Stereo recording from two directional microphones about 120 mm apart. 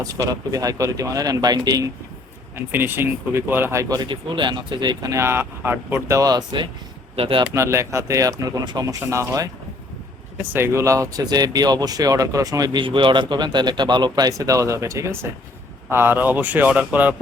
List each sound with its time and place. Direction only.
0.0 s speech: 30° right (ahead or behind)
2.6 s speech: 20° right (ahead or behind)
6.1 s speech: 35° right (ahead or behind)
7.2 s speech: 50° right (ahead or behind)
7.5 s speech: 25° right (ahead or behind)
12.8 s speech: 45° right (ahead or behind); by 17.2 s 15° right (ahead or behind)